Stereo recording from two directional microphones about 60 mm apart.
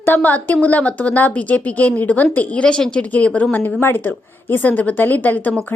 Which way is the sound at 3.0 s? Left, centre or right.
Left.